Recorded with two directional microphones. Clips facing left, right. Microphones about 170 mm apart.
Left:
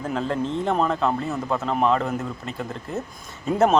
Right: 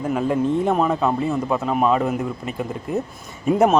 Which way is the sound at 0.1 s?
10° right (ahead or behind).